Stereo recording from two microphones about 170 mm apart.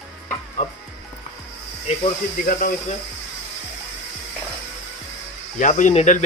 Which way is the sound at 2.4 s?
55° left (ahead or behind).